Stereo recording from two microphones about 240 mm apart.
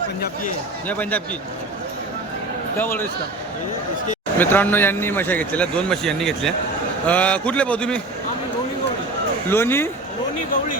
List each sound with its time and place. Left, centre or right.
0.9 s a man's voice: centre
2.7 s a man's voice: centre
4.4 s a man's voice: centre
9.5 s a man's voice: centre